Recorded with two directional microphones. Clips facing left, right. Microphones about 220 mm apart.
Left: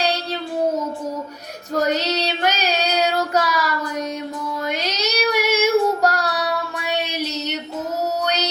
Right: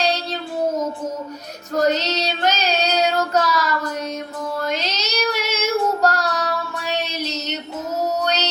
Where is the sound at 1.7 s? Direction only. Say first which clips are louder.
Right 1 dB; 10° left (ahead or behind).